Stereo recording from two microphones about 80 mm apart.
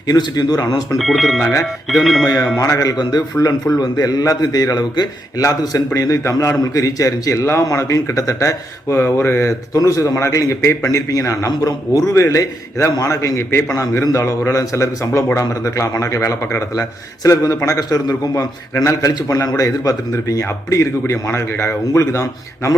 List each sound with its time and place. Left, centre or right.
0.1 s speech: left
0.9 s speech: centre
2.2 s a man's voice: left
5.4 s a man's voice: left
9.7 s a man's voice: left